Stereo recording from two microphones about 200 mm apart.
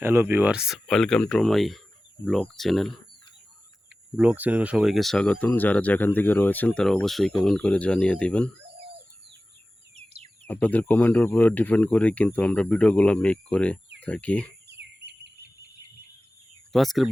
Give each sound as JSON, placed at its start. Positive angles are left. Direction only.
{"t": 0.0, "sound": "speech", "side_deg": -10}
{"t": 4.2, "sound": "speech", "side_deg": -5}
{"t": 10.4, "sound": "speech", "side_deg": 5}
{"t": 14.7, "sound": "a sound", "side_deg": -55}
{"t": 16.7, "sound": "speech", "side_deg": 0}